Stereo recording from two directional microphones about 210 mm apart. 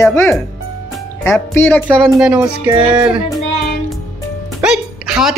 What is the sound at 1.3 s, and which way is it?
Speech, 10° left (ahead or behind).